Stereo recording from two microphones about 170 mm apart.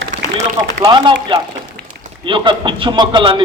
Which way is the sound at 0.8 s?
25° right (ahead or behind).